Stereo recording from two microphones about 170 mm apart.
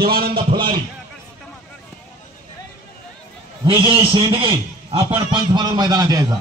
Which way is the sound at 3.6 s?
30° right (ahead or behind).